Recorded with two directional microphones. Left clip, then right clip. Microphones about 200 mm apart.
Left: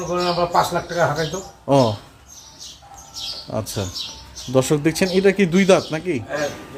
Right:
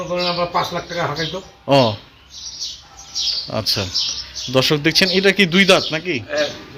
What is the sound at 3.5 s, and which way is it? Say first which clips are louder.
Speech: right 6 dB; 5° right (ahead or behind).